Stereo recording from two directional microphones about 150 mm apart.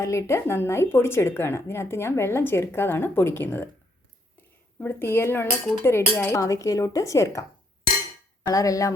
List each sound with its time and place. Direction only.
0.0 s a woman's voice: 20° left (ahead or behind)
4.8 s a woman's voice: 15° left (ahead or behind)
8.4 s speech: 25° left (ahead or behind)